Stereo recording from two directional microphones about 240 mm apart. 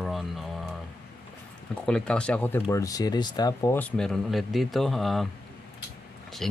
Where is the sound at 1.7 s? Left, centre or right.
Centre.